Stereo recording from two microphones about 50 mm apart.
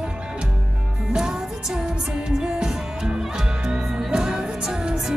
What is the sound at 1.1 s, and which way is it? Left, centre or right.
Music, centre.